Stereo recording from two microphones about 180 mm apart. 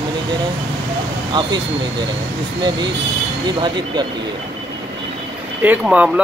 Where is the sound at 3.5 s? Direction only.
25° right (ahead or behind).